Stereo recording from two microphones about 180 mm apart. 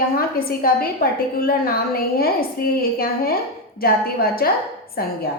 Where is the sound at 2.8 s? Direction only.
55° left (ahead or behind).